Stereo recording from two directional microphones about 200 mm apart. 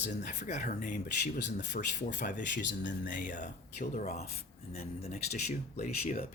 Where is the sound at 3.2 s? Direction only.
40° left (ahead or behind).